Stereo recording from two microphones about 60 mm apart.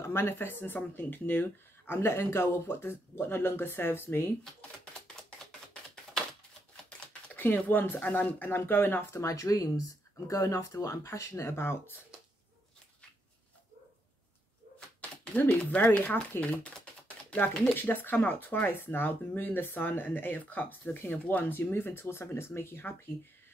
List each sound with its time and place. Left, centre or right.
0.0 s speech: left
6.8 s typing: centre
7.3 s speech: left
9.1 s speech: left
15.6 s speech: left
17.7 s speech: left
21.5 s speech: left